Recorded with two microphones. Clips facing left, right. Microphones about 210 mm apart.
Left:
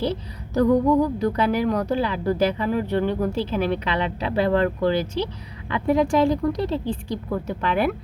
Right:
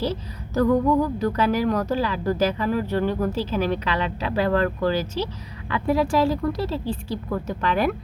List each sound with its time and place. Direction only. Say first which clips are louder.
0.5 s speech: left 1 dB; 15° left (ahead or behind)